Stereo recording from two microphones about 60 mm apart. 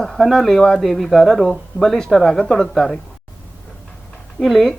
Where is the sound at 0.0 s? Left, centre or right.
Centre.